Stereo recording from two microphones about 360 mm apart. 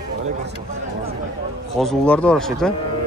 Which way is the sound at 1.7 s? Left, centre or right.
Centre.